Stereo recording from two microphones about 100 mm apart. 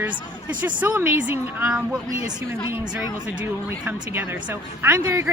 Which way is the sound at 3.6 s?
25° right (ahead or behind).